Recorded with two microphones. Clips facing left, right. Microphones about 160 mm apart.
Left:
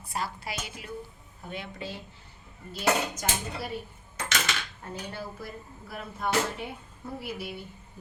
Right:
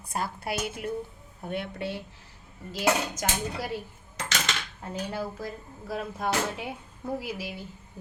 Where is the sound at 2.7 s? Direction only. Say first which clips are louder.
Right 1 dB; 90° right.